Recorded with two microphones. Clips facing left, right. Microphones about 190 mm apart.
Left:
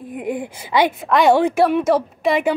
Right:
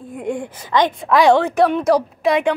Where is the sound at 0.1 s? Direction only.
5° left (ahead or behind).